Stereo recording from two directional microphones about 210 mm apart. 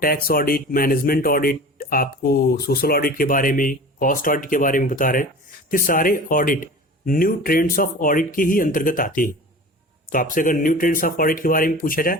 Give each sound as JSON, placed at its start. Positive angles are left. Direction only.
{"t": 0.0, "sound": "speech", "side_deg": 45}